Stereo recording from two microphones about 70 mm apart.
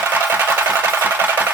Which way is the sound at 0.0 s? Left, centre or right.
Right.